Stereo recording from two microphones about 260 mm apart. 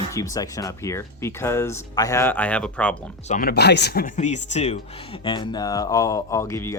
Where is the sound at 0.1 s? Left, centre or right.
Centre.